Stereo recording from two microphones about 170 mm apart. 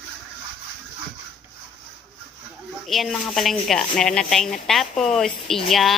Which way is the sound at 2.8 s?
Centre (ahead or behind).